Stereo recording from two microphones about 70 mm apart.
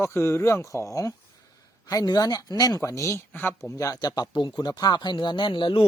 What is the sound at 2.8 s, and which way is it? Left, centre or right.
Speech, left.